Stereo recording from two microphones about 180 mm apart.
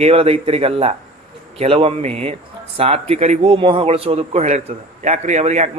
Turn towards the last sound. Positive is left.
turn(degrees=-40)  # may be behind; listen again after turning